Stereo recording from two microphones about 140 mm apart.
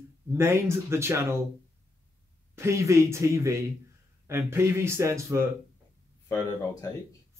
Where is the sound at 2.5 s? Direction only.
20° right (ahead or behind).